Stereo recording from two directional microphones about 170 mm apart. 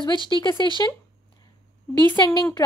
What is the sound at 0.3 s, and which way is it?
Speech, 25° left (ahead or behind).